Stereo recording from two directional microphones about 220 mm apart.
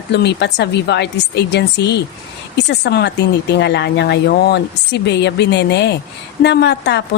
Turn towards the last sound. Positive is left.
turn(degrees=50)  # may be behind; listen again after turning